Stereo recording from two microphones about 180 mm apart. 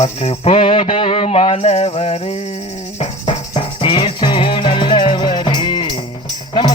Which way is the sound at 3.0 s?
40° left (ahead or behind).